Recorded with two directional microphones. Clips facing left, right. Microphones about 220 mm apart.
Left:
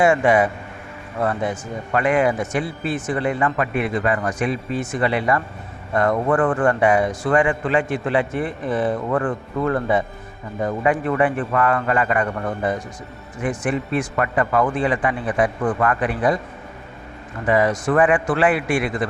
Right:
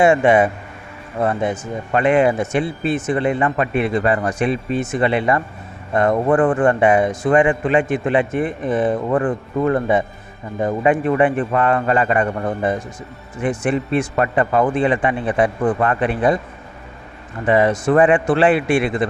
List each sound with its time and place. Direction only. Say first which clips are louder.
0.0 s speech: right 3 dB; 25° right (ahead or behind)
17.4 s speech: right 3 dB; 25° right (ahead or behind)